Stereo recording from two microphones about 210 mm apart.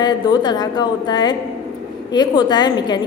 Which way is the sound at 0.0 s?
20° left (ahead or behind).